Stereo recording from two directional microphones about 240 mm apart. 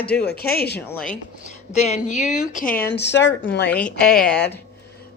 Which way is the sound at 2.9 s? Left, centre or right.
Left.